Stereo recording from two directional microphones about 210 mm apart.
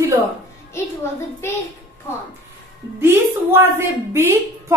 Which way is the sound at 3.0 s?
10° right (ahead or behind).